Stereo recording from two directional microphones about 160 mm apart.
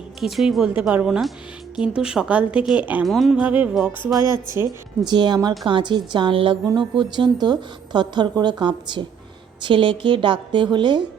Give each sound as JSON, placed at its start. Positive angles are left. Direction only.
{"t": 0.2, "sound": "a woman's voice", "side_deg": 0}
{"t": 5.0, "sound": "a woman's voice", "side_deg": -25}